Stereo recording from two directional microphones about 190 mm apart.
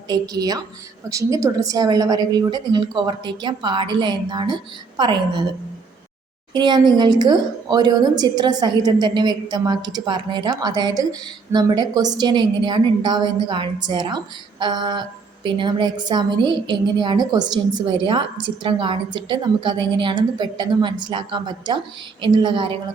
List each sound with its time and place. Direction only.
0.1 s speech: 20° right (ahead or behind)
6.5 s speech: 25° right (ahead or behind)